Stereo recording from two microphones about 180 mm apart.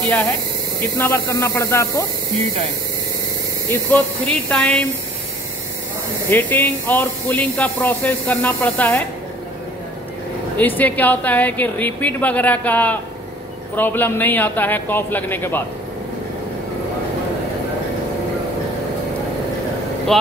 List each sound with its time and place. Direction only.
0.9 s speech: 10° left (ahead or behind)
3.7 s speech: 5° left (ahead or behind)
6.3 s speech: 10° left (ahead or behind)
10.8 s speech: 10° left (ahead or behind)
20.1 s speech: centre (ahead or behind)